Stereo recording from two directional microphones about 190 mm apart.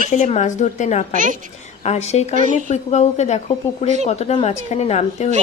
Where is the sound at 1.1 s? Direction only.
45° right (ahead or behind).